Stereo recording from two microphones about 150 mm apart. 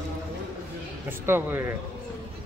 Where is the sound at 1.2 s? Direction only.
15° right (ahead or behind).